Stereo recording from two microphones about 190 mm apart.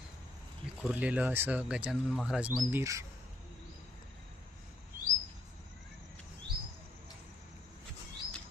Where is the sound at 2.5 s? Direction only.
15° right (ahead or behind).